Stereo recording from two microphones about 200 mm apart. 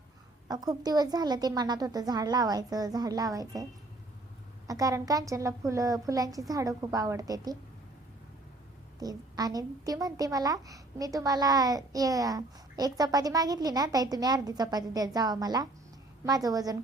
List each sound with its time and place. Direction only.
0.4 s a woman's voice: 20° right (ahead or behind)
4.7 s a woman's voice: 15° right (ahead or behind)
9.0 s a woman's voice: 20° right (ahead or behind)